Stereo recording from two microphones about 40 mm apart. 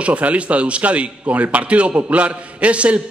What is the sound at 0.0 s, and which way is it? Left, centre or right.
A man's voice, right.